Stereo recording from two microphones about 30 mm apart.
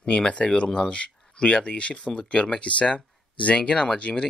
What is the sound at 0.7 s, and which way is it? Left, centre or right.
Speech, left.